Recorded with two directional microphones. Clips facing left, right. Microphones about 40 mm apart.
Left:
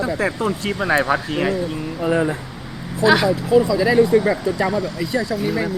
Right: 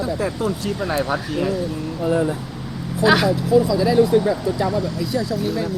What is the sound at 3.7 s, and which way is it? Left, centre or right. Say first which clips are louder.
Speech: left 1 dB; centre.